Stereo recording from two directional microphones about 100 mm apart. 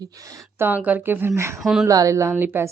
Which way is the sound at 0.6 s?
15° right (ahead or behind).